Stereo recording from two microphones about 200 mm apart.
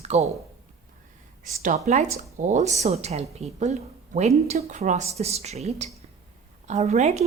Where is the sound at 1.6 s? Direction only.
35° right (ahead or behind).